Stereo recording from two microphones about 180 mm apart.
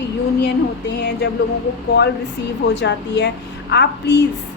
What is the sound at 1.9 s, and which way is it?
A woman's voice, 65° left (ahead or behind).